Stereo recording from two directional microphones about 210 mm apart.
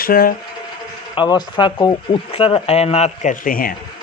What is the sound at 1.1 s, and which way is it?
A man's voice, 20° left (ahead or behind).